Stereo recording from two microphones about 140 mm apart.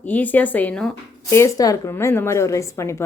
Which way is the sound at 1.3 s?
20° left (ahead or behind).